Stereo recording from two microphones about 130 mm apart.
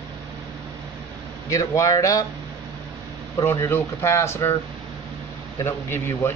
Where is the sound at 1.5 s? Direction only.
25° left (ahead or behind).